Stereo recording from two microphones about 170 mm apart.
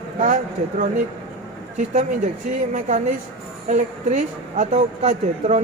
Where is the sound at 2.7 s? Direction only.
50° right (ahead or behind).